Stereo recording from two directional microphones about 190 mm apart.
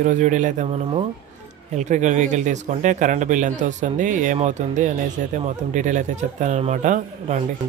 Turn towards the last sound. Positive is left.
turn(degrees=-40)  # may be behind; listen again after turning